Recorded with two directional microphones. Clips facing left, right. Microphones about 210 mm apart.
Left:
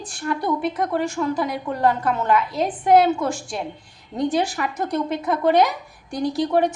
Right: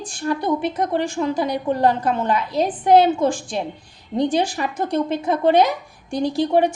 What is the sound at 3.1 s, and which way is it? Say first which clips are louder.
A woman's voice: right 4 dB; 30° right (ahead or behind).